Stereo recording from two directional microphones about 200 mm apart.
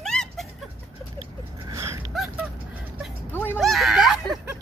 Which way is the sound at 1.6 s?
15° right (ahead or behind).